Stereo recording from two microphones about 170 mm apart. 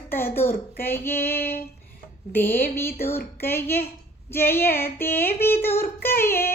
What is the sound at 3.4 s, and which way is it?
Singing, 15° left (ahead or behind).